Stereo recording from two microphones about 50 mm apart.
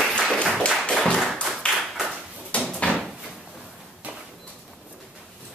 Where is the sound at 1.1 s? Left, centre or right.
Centre.